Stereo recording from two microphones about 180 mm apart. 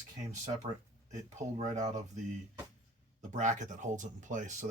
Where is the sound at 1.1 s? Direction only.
40° right (ahead or behind).